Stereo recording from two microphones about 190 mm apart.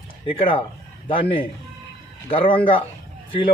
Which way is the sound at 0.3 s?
25° left (ahead or behind).